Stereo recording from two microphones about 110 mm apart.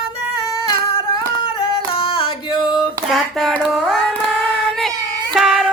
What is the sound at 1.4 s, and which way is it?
Yodeling, 50° left (ahead or behind).